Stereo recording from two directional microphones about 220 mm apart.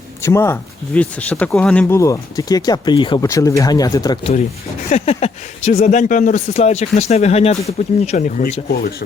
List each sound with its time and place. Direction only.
0.2 s speech: 10° left (ahead or behind)
4.9 s speech: 30° left (ahead or behind)